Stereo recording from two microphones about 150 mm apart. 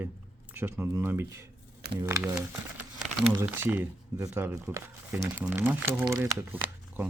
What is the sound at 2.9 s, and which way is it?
Crumpling, 5° right (ahead or behind).